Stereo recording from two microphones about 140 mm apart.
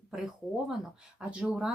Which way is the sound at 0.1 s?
5° right (ahead or behind).